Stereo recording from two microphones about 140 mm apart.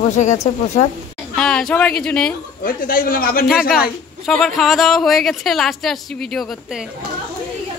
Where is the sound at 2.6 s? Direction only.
90° left.